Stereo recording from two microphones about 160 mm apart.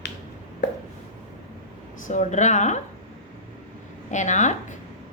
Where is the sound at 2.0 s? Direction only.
50° left (ahead or behind).